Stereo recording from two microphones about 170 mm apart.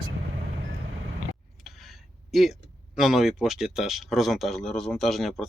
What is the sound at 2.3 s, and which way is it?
Speech, centre (ahead or behind).